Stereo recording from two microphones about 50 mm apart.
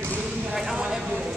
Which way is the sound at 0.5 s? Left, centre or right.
Centre.